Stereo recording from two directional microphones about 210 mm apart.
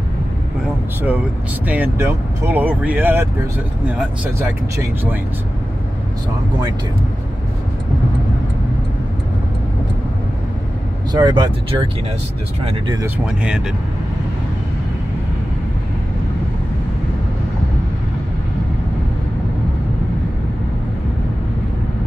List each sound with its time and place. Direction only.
1.7 s speech: 10° right (ahead or behind)
11.1 s speech: 20° right (ahead or behind)
13.2 s speech: 5° right (ahead or behind)